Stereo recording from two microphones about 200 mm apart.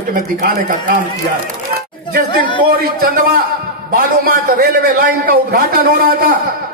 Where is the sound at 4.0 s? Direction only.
45° right (ahead or behind).